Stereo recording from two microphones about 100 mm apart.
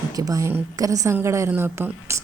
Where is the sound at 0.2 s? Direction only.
35° right (ahead or behind).